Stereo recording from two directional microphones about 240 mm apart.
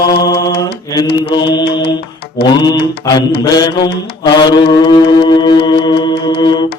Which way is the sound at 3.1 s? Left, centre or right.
Centre.